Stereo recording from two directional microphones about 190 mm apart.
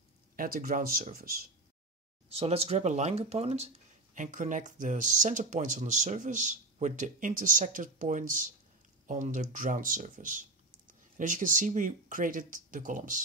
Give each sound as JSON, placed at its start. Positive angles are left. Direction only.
{"t": 0.4, "sound": "speech", "side_deg": -50}
{"t": 2.3, "sound": "speech", "side_deg": -30}